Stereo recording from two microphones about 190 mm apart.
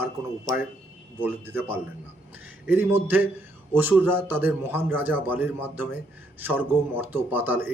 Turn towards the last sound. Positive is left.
turn(degrees=-10)  # may be behind; listen again after turning